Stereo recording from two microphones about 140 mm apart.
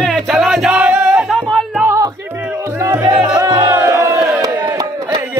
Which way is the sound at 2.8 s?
20° right (ahead or behind).